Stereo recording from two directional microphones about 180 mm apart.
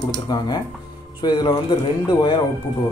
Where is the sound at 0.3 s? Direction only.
25° left (ahead or behind).